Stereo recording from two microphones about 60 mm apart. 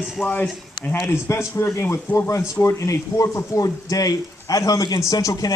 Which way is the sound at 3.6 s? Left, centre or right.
Left.